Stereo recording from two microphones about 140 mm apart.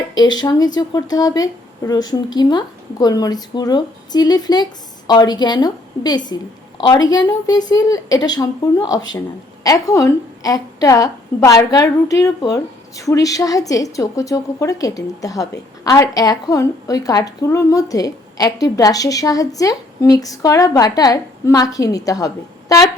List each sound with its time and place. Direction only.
0.1 s a woman's voice: 30° left (ahead or behind)